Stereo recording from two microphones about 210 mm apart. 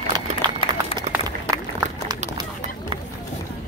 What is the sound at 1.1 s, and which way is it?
Run, 35° right (ahead or behind).